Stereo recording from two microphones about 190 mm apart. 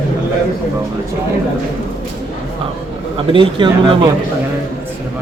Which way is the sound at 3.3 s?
25° right (ahead or behind).